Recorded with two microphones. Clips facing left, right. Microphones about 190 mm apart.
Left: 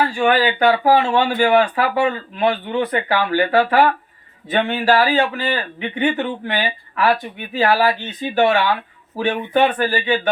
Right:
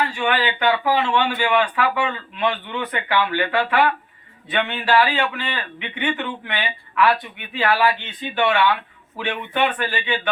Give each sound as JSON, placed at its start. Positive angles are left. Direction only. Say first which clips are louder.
{"t": 0.0, "sound": "speech", "louder": "left 5 dB", "side_deg": 40}